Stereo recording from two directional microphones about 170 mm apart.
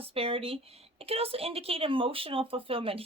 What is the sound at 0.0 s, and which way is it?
Speech, 35° right (ahead or behind).